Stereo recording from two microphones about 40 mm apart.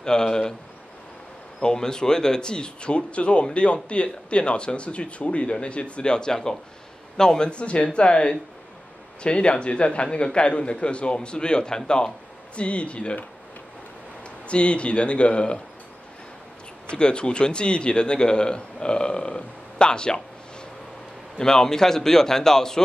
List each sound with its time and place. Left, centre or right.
0.0 s a man's voice: centre
1.6 s speech: centre
12.5 s speech: left
14.5 s speech: left
16.9 s a man's voice: left
21.4 s a man's voice: centre